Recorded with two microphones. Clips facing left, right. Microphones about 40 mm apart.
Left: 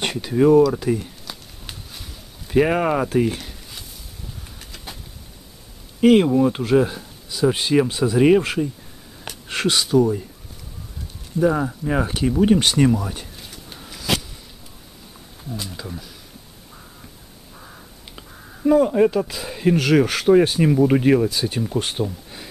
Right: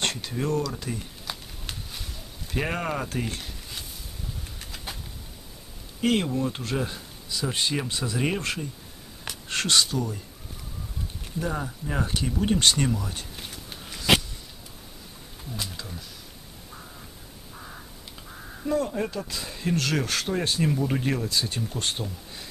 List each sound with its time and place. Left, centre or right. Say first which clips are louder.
0.0 s speech: left 11 dB; centre
1.3 s run: right 4 dB; centre
1.7 s a sound: even; centre
2.5 s speech: left 11 dB; centre
4.6 s vehicle: left 1 dB; centre
5.9 s speech: left 10 dB; centre
11.3 s speech: left 11 dB; centre
13.5 s a sound: left 1 dB; centre
15.7 s speech: left 6 dB; centre
17.6 s crow: even; centre
18.6 s speech: left 11 dB; centre